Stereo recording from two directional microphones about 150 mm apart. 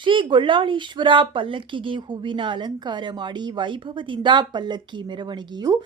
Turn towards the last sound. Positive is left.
turn(degrees=-25)  # may be behind; listen again after turning